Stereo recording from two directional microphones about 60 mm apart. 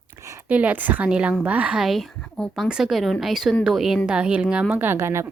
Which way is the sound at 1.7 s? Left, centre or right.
Centre.